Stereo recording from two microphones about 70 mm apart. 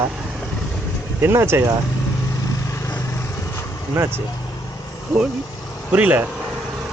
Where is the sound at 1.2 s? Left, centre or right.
Right.